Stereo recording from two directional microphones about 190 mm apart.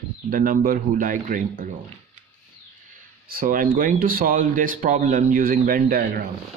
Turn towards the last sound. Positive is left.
turn(degrees=-50)  # may be behind; listen again after turning